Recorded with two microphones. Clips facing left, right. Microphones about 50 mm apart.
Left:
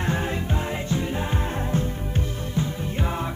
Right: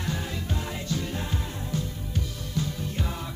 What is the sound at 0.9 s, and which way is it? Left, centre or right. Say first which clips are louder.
Music: left 4 dB; left.